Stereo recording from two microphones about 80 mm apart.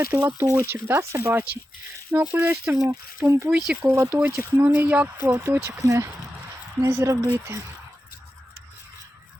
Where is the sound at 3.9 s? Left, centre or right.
Right.